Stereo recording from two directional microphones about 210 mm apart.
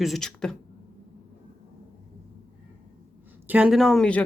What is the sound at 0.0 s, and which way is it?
Speech, centre (ahead or behind).